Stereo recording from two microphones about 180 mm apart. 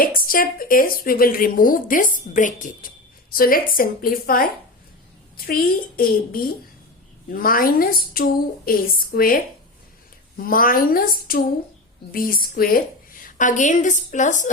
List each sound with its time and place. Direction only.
0.0 s speech: 50° left (ahead or behind)
5.5 s a woman's voice: 55° left (ahead or behind)